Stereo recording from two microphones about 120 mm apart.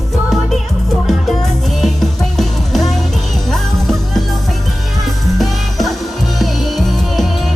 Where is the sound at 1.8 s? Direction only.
5° left (ahead or behind).